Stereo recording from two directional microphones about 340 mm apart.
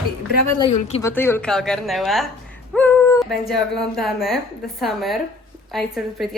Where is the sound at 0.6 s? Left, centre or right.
Centre.